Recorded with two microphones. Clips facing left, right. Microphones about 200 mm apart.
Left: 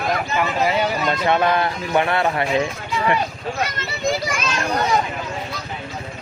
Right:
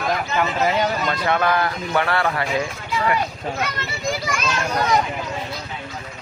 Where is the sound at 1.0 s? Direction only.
20° left (ahead or behind).